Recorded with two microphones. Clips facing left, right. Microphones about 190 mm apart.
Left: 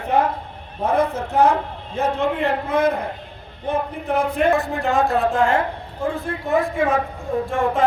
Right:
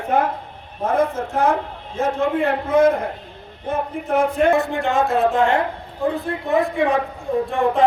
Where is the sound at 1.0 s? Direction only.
65° left (ahead or behind).